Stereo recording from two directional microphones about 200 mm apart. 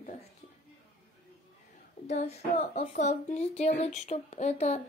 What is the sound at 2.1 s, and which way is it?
Speech, 35° left (ahead or behind).